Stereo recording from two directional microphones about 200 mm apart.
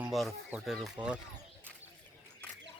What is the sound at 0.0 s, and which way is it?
Speech, centre (ahead or behind).